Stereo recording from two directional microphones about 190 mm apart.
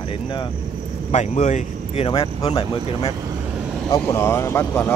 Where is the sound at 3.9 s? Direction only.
15° left (ahead or behind).